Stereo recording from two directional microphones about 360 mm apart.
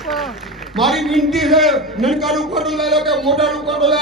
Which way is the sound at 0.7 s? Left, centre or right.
Centre.